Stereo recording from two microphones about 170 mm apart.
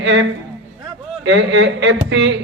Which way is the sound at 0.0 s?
90° right.